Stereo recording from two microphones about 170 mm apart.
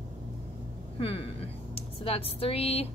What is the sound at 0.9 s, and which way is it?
Speech, 35° left (ahead or behind).